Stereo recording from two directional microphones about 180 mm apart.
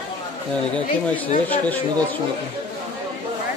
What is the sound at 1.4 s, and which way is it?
Speech, 10° left (ahead or behind).